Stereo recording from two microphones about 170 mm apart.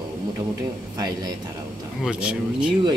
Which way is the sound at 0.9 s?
20° right (ahead or behind).